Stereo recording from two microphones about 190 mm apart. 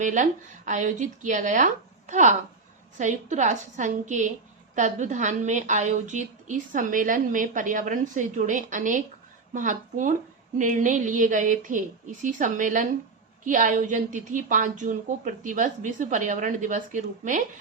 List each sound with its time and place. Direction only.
0.0 s a woman's voice: 40° right (ahead or behind)